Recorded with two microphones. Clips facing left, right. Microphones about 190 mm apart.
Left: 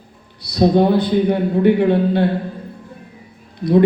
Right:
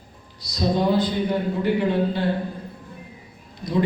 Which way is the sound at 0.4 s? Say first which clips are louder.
Left 8 dB; 60° left (ahead or behind).